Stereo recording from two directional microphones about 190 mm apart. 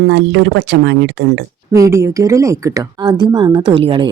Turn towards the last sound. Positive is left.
turn(degrees=-25)  # may be behind; listen again after turning